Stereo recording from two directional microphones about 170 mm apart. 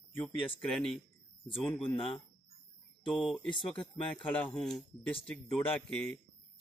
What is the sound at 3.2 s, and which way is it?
Speech, centre (ahead or behind).